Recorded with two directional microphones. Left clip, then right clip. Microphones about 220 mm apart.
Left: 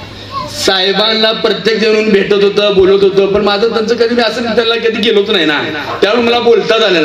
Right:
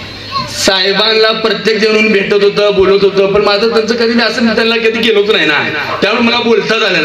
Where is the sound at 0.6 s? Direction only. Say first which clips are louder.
Even; 50° left (ahead or behind).